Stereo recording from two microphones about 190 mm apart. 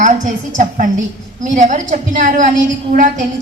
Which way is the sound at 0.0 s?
40° right (ahead or behind).